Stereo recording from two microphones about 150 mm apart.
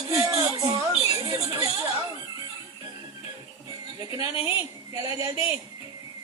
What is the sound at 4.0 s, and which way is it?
A woman's voice, 25° right (ahead or behind).